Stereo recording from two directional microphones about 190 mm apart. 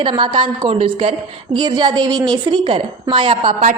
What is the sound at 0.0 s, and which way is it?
A woman's voice, 25° right (ahead or behind).